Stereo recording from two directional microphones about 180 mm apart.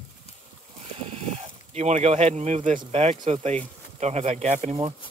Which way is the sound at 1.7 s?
40° right (ahead or behind).